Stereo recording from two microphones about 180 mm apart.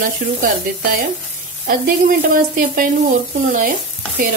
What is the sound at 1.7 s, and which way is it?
Speech, 50° right (ahead or behind).